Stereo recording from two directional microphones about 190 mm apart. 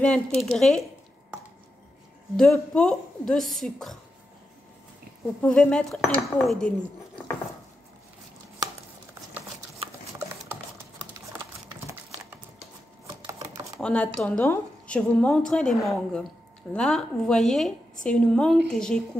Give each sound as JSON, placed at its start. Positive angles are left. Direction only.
{"t": 0.0, "sound": "a woman's voice", "side_deg": 5}
{"t": 2.3, "sound": "a woman's voice", "side_deg": 0}
{"t": 5.4, "sound": "a woman's voice", "side_deg": 5}
{"t": 13.0, "sound": "typewriter", "side_deg": -20}
{"t": 13.7, "sound": "a woman's voice", "side_deg": 5}